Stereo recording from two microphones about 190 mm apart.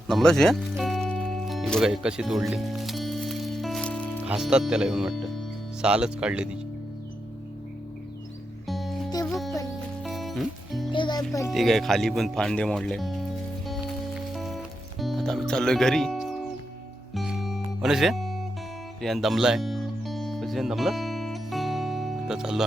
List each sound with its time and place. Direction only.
0.1 s music: 5° left (ahead or behind)
4.3 s speech: 5° right (ahead or behind)
8.6 s music: centre (ahead or behind)
10.9 s music: 25° left (ahead or behind)
11.5 s speech: centre (ahead or behind)
13.7 s music: centre (ahead or behind)